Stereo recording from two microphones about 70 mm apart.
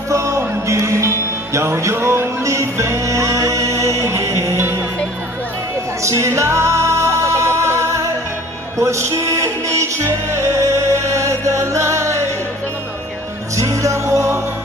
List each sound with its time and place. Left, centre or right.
0.1 s music: right
6.0 s music: right
13.6 s music: right